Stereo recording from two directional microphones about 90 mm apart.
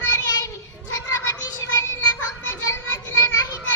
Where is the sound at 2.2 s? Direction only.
30° left (ahead or behind).